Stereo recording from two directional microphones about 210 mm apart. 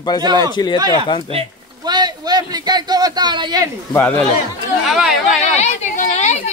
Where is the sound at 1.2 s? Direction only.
25° right (ahead or behind).